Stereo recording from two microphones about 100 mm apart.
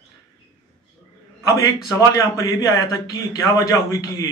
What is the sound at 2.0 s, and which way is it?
A man's voice, 35° left (ahead or behind).